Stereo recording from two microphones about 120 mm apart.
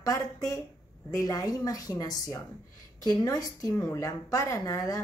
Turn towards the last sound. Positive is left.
turn(degrees=30)  # may be behind; listen again after turning